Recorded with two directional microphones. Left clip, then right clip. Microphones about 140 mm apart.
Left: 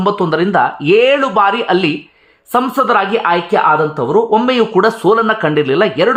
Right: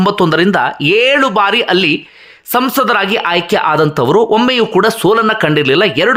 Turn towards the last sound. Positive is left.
turn(degrees=-20)  # may be behind; listen again after turning